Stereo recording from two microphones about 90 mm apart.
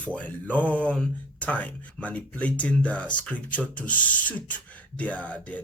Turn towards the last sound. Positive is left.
turn(degrees=15)  # may be behind; listen again after turning